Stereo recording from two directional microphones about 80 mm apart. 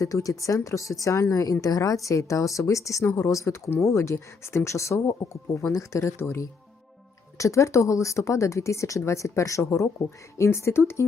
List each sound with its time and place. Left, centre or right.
0.0 s speech: left
3.0 s a woman's voice: left
3.2 s speech: left